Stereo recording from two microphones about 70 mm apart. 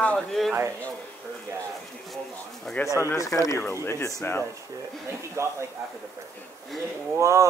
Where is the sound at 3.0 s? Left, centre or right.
Left.